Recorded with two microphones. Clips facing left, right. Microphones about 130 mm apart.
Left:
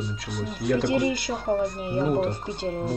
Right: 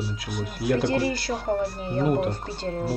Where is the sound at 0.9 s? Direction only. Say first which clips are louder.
Left 1 dB; 15° left (ahead or behind).